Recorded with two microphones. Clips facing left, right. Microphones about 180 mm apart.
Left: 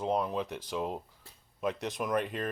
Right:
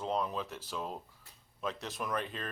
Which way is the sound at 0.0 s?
10° left (ahead or behind).